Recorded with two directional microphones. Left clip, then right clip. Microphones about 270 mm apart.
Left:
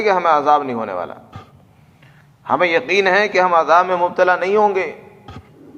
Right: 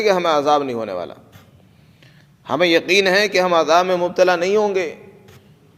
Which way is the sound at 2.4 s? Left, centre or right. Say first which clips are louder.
Left 1 dB; right.